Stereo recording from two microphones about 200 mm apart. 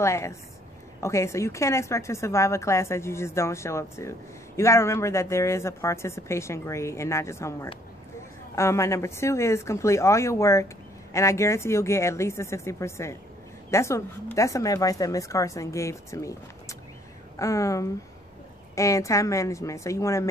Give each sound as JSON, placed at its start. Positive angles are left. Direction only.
{"t": 0.0, "sound": "a woman's voice", "side_deg": 15}